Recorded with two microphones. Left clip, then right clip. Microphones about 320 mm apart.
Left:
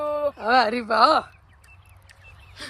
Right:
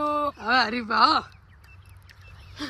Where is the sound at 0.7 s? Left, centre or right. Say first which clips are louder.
Left 2 dB; centre.